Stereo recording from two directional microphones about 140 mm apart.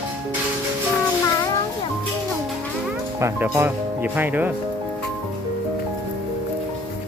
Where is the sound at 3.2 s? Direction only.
15° right (ahead or behind).